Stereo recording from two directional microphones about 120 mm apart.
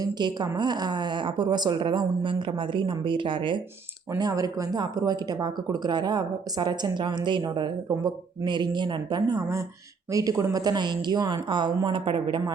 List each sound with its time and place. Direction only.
0.0 s speech: 35° right (ahead or behind)
4.2 s speech: 30° right (ahead or behind)